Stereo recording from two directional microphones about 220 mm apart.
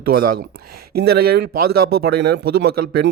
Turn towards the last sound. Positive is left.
turn(degrees=-45)  # may be behind; listen again after turning